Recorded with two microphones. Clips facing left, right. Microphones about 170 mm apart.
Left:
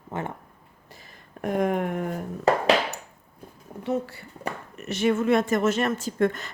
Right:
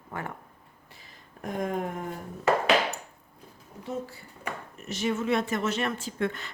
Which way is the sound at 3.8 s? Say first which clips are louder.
Left 7 dB; 70° left (ahead or behind).